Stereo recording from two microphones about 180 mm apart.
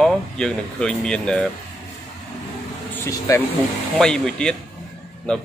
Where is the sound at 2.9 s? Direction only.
15° left (ahead or behind).